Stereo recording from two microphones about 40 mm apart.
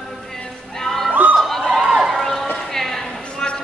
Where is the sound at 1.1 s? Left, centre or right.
Right.